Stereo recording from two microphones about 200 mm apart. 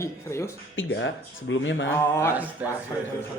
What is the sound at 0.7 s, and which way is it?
Speech, 75° left (ahead or behind).